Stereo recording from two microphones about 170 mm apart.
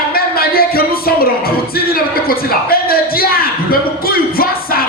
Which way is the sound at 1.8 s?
60° left (ahead or behind).